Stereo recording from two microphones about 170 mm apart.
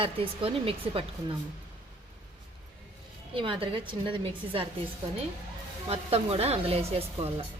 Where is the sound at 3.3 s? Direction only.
30° right (ahead or behind).